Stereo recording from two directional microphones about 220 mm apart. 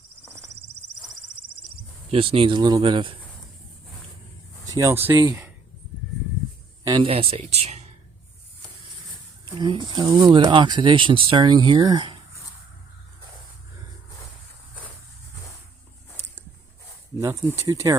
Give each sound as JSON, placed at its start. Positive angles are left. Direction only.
{"t": 2.0, "sound": "speech", "side_deg": -25}
{"t": 4.6, "sound": "speech", "side_deg": -15}
{"t": 6.8, "sound": "speech", "side_deg": -20}
{"t": 9.6, "sound": "speech", "side_deg": -20}
{"t": 17.6, "sound": "speech", "side_deg": -15}